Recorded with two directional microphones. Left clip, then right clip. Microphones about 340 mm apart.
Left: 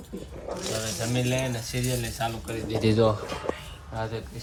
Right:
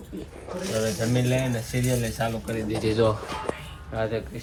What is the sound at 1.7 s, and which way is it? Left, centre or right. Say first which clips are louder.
Speech: right 4 dB; centre.